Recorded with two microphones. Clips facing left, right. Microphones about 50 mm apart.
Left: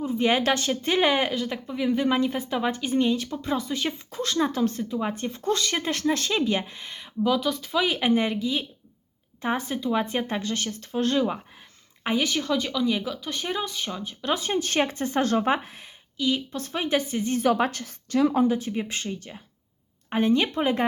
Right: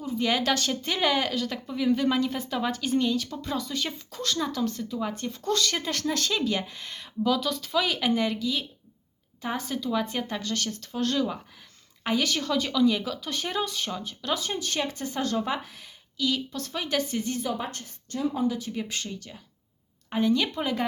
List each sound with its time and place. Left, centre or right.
0.0 s speech: left
7.9 s speech: left
12.0 s speech: centre
17.4 s a woman's voice: left
18.4 s speech: left